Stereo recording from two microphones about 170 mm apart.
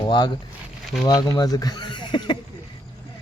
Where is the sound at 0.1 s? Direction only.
25° left (ahead or behind).